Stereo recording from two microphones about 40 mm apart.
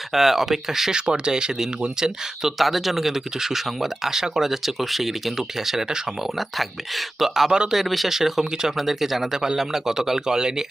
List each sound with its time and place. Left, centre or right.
0.1 s speech: centre
2.4 s speech: centre